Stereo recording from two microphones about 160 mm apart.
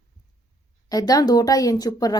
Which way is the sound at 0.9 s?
25° left (ahead or behind).